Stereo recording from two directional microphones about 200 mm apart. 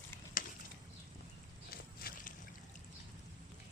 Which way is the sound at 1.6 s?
45° left (ahead or behind).